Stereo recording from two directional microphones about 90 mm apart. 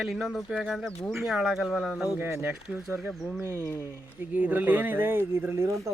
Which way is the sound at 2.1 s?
25° right (ahead or behind).